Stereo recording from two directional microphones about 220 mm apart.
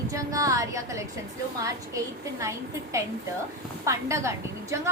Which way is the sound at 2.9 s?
15° right (ahead or behind).